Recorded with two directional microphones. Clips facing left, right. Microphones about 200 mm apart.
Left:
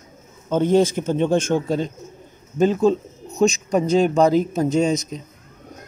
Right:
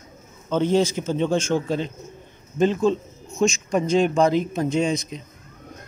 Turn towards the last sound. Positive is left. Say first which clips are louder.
# left 3 dB
turn(degrees=40)  # may be behind; listen again after turning